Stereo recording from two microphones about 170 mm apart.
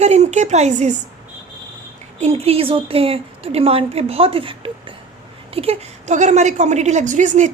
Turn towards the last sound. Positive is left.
turn(degrees=-45)  # may be behind; listen again after turning